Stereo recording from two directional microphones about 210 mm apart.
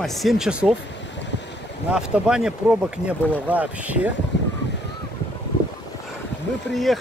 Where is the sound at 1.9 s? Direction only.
5° right (ahead or behind).